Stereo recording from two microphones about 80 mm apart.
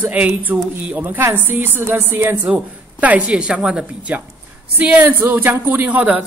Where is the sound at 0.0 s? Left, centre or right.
Right.